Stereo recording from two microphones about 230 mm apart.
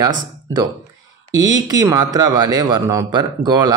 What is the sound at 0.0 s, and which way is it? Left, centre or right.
A man's voice, centre.